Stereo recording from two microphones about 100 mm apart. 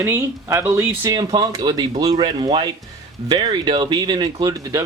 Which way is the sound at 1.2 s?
45° right (ahead or behind).